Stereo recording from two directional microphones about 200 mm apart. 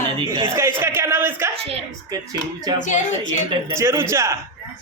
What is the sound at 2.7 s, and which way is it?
A man's voice, 20° right (ahead or behind).